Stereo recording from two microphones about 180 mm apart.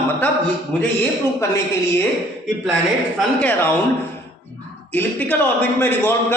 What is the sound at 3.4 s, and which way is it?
Speech, 10° left (ahead or behind).